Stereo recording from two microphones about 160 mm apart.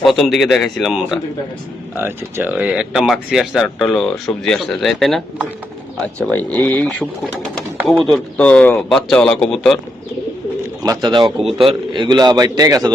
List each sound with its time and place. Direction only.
0.0 s speech: centre (ahead or behind)
2.0 s speech: 15° right (ahead or behind)
6.2 s speech: 10° left (ahead or behind)
8.4 s speech: 5° left (ahead or behind)
10.8 s a man's voice: 25° right (ahead or behind)